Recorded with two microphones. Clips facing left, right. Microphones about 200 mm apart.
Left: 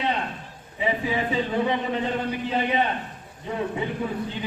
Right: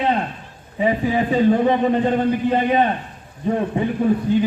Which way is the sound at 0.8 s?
45° right (ahead or behind).